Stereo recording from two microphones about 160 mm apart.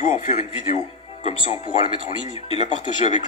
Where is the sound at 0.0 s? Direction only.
50° left (ahead or behind).